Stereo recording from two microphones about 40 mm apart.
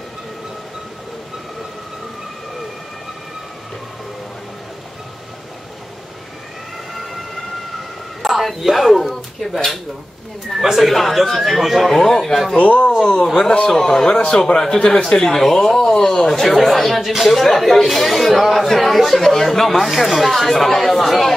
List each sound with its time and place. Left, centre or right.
8.2 s a sound: centre
10.5 s speech: centre
12.5 s speech: left
13.7 s speech: centre